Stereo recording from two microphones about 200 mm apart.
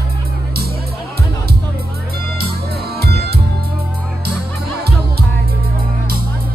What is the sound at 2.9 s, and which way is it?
Music, 55° right (ahead or behind).